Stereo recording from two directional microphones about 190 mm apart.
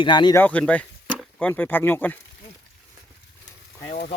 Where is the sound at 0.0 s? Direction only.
25° left (ahead or behind).